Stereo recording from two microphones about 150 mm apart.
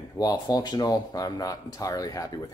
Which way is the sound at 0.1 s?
25° left (ahead or behind).